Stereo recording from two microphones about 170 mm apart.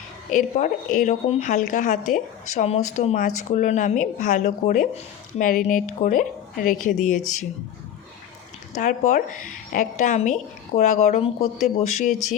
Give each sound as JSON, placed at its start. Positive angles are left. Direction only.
{"t": 0.3, "sound": "speech", "side_deg": 50}
{"t": 8.7, "sound": "speech", "side_deg": 45}